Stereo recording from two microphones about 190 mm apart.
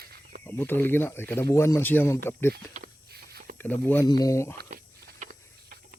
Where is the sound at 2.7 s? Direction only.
55° right (ahead or behind).